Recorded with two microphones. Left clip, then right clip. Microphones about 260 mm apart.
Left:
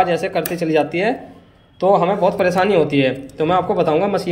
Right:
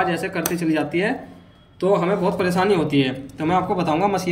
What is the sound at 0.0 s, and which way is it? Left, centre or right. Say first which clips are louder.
A man's voice: left 5 dB; centre.